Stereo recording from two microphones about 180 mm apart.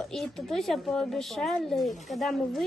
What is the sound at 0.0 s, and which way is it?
Speech, centre (ahead or behind).